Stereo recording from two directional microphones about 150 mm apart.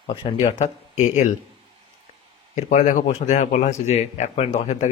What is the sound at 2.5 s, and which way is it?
Speech, 55° left (ahead or behind).